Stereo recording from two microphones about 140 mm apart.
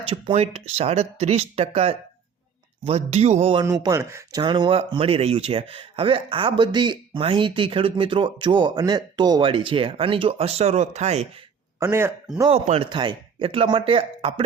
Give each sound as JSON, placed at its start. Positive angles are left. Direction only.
{"t": 0.1, "sound": "speech", "side_deg": -45}
{"t": 3.5, "sound": "speech", "side_deg": -30}
{"t": 11.8, "sound": "a man's voice", "side_deg": -20}
{"t": 12.5, "sound": "speech", "side_deg": -45}